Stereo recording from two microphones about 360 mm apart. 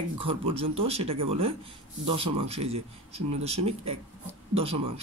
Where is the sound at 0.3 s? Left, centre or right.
Centre.